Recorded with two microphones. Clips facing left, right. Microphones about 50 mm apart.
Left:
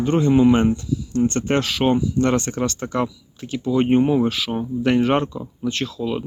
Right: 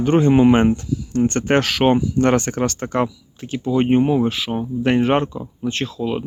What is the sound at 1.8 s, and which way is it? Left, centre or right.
Speech, right.